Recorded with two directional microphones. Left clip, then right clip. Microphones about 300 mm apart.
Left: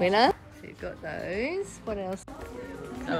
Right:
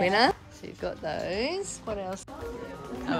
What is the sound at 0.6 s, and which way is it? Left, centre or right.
A woman's voice, centre.